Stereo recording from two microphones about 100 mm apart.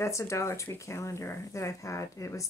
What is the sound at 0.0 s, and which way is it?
Speech, 30° left (ahead or behind).